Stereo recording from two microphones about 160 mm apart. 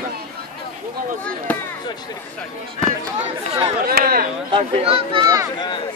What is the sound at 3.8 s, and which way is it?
Speech, 70° right (ahead or behind).